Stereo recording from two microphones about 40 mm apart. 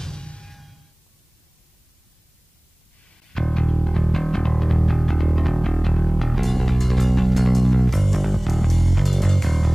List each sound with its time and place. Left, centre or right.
0.0 s music: left
0.5 s music: centre
3.3 s music: centre